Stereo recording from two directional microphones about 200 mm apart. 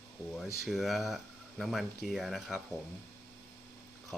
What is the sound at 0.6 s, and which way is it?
Speech, centre (ahead or behind).